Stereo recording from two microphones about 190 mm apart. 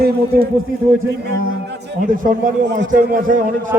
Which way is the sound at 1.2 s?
60° right (ahead or behind).